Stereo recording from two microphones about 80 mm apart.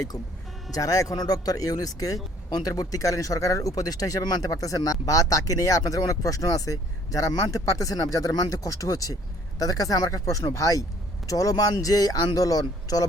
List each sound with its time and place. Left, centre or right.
0.7 s speech: left